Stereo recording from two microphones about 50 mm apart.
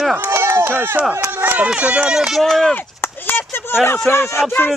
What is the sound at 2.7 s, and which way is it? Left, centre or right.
Chop, left.